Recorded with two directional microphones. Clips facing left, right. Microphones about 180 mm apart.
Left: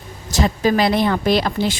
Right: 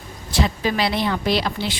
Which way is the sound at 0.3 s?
45° left (ahead or behind).